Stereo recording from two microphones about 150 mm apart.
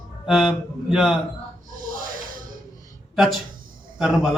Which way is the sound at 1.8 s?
65° right (ahead or behind).